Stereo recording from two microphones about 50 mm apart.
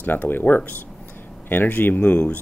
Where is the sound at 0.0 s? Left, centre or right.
Left.